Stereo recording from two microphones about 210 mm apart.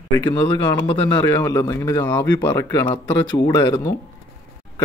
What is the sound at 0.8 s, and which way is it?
Speech, 20° left (ahead or behind).